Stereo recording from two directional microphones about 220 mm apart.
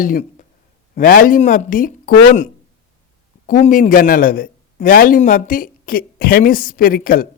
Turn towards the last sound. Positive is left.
turn(degrees=40)  # may be behind; listen again after turning